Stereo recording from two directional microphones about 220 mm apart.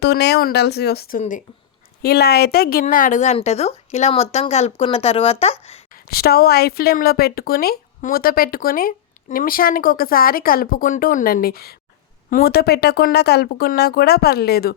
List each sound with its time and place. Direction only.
0.0 s a woman's voice: 50° left (ahead or behind); by 5.8 s 25° left (ahead or behind)
5.9 s a woman's voice: 45° left (ahead or behind)